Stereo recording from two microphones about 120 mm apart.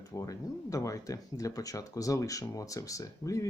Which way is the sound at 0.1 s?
25° left (ahead or behind).